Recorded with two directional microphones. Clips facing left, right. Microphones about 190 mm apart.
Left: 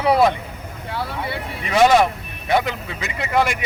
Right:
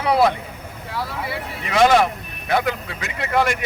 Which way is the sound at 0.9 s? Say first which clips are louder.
Left 1 dB; 25° left (ahead or behind).